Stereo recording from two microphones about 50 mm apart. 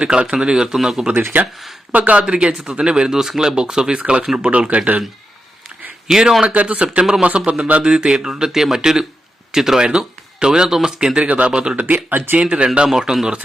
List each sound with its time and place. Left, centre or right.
0.0 s speech: right
1.4 s speech: right
2.3 s speech: right
6.1 s speech: centre
6.4 s speech: right
11.9 s speech: right
12.4 s speech: right